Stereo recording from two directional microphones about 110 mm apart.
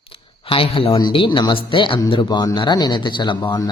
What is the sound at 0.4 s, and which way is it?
A man's voice, 55° left (ahead or behind).